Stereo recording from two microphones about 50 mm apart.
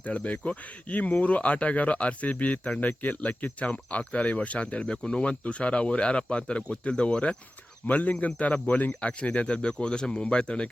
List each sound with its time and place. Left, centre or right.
0.0 s speech: left